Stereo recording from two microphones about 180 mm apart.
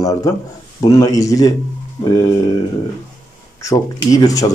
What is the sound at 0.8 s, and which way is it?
Speech, 20° left (ahead or behind).